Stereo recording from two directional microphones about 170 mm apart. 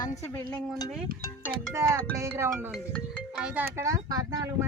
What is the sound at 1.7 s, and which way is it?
Speech, 15° right (ahead or behind).